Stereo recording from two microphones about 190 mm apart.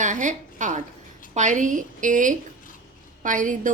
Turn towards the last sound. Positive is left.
turn(degrees=-40)  # may be behind; listen again after turning